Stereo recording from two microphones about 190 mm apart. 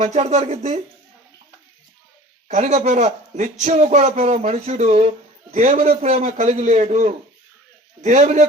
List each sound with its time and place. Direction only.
0.0 s speech: 35° right (ahead or behind)
2.5 s speech: 40° right (ahead or behind)